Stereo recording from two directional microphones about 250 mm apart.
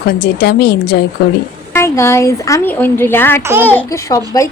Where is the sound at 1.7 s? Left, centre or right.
Centre.